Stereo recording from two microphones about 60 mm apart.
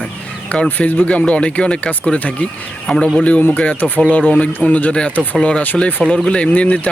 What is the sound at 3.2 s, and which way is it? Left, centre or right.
Speech, left.